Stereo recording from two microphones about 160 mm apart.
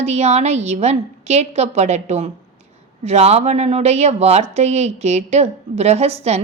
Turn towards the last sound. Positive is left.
turn(degrees=-40)  # may be behind; listen again after turning